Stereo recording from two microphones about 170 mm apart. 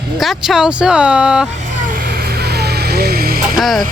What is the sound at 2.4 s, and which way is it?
Vehicle, 70° right (ahead or behind).